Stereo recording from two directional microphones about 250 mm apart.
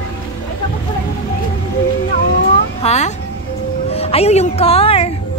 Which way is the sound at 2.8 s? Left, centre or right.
Left.